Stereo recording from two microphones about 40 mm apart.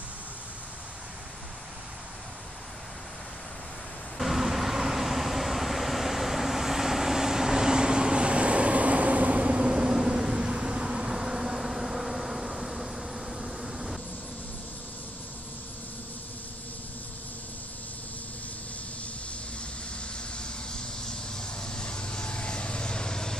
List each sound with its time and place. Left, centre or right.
4.2 s vehicle: centre; by 9.7 s right
9.7 s a sound: centre
20.3 s vehicle: centre